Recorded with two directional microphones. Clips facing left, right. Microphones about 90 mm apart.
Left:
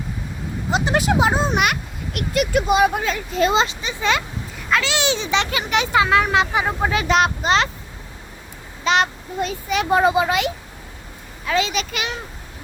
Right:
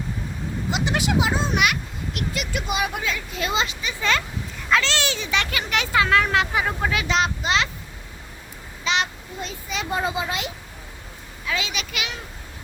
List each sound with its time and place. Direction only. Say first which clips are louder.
0.7 s speech: left 5 dB; 40° left (ahead or behind); by 4.2 s 20° left (ahead or behind)
4.7 s a child's voice: even; 5° left (ahead or behind)
4.9 s speech: left 4 dB; 20° left (ahead or behind)
7.4 s speech: left 5 dB; 40° left (ahead or behind)
8.8 s a child's voice: left 6 dB; 45° left (ahead or behind); by 10.5 s 70° left (ahead or behind)
11.4 s speech: left 7 dB; 40° left (ahead or behind)